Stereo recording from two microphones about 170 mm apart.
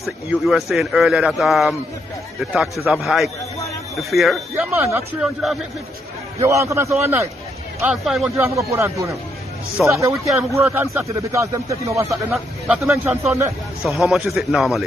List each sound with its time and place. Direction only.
0.0 s speech: centre (ahead or behind)
4.6 s speech: 15° right (ahead or behind)
5.2 s speech: centre (ahead or behind)
6.4 s speech: 15° right (ahead or behind)
7.8 s speech: centre (ahead or behind)
8.4 s speech: 15° right (ahead or behind); by 14.9 s centre (ahead or behind)